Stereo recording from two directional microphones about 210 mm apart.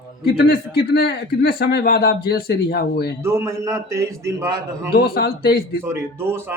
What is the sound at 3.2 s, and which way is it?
A man's voice, 15° right (ahead or behind).